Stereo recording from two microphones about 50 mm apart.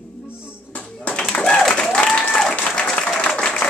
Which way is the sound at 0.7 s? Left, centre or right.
Left.